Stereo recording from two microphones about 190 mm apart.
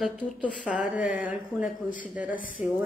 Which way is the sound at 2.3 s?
45° left (ahead or behind).